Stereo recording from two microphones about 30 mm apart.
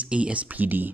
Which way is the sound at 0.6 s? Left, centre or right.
Right.